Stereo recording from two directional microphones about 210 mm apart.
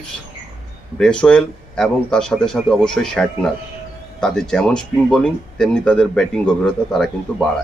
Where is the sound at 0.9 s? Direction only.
5° left (ahead or behind).